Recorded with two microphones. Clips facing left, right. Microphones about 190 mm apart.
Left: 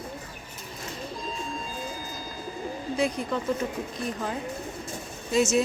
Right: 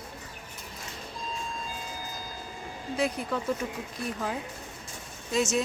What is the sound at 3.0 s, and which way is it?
Speech, 5° right (ahead or behind).